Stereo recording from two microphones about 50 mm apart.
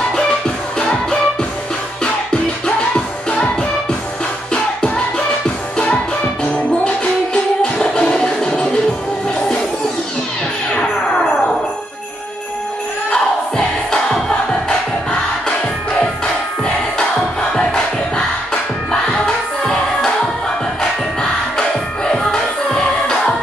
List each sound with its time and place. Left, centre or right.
0.7 s music: centre
2.3 s music: centre
7.8 s music: centre
10.7 s music: centre
13.1 s music: centre
17.5 s music: centre